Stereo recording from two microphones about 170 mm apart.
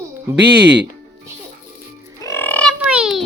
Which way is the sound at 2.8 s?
5° right (ahead or behind).